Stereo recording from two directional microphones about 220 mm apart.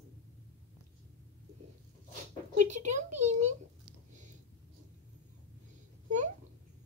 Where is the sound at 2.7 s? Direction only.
30° right (ahead or behind).